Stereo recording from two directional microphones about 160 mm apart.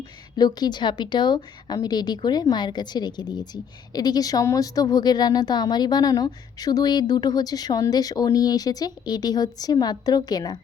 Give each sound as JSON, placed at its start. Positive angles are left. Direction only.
{"t": 0.3, "sound": "a woman's voice", "side_deg": 25}